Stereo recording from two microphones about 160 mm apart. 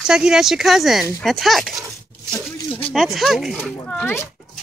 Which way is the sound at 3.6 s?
10° left (ahead or behind).